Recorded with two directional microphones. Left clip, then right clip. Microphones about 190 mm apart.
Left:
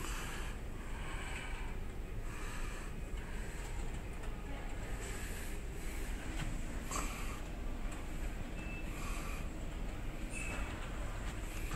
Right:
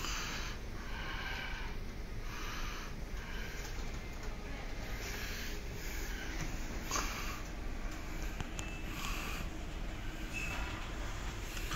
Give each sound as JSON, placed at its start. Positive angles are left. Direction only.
{"t": 0.0, "sound": "snort", "side_deg": 20}
{"t": 1.0, "sound": "vehicle", "side_deg": 10}
{"t": 6.9, "sound": "a sound", "side_deg": 5}